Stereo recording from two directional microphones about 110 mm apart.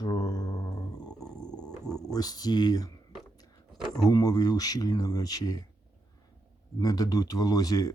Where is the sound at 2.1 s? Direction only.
35° left (ahead or behind).